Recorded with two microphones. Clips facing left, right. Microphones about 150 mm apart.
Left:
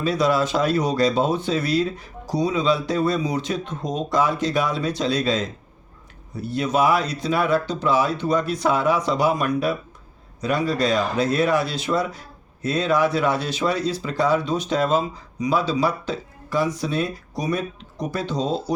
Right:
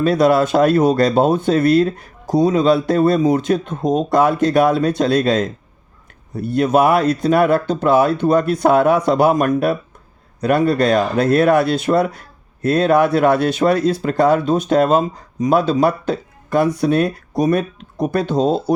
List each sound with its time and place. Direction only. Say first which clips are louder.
0.0 s speech: right 7 dB; 55° right (ahead or behind)